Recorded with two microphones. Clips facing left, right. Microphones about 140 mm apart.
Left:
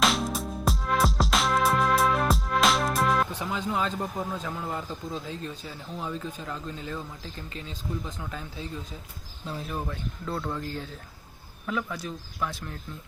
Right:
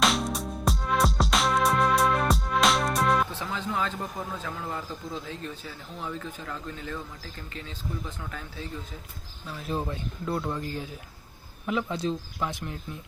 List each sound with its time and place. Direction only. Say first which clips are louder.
0.0 s music: even; centre (ahead or behind)
3.3 s speech: left 2 dB; 15° left (ahead or behind)
8.3 s speech: left 1 dB; 20° left (ahead or behind)
9.6 s speech: right 6 dB; 25° right (ahead or behind)